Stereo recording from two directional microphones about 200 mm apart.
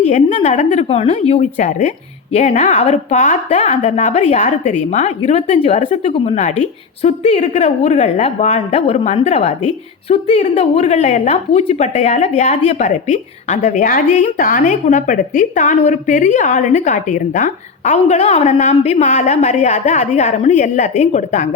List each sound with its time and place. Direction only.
0.0 s speech: 35° left (ahead or behind)